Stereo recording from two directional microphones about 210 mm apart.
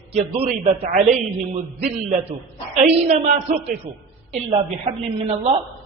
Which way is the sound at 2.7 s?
35° right (ahead or behind).